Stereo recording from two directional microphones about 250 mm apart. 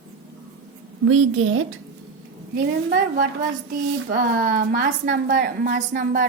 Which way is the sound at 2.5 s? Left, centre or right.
Right.